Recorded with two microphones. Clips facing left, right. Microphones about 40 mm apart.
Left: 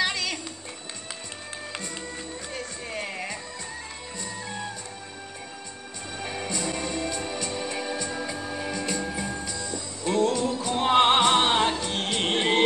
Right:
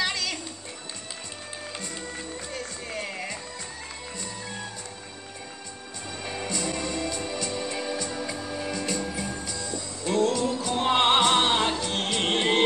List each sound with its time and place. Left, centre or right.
0.0 s music: left
2.5 s music: left
6.2 s music: left
10.1 s music: centre
10.9 s music: centre
12.2 s music: centre